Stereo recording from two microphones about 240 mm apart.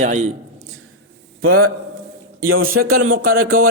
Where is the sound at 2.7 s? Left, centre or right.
Right.